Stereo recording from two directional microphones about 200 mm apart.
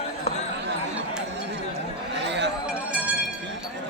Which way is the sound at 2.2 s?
60° right (ahead or behind).